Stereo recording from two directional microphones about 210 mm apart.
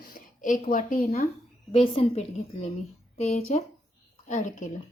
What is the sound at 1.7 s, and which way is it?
Speech, 25° left (ahead or behind).